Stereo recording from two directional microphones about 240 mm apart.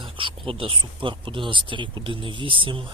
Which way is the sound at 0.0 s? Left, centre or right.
Right.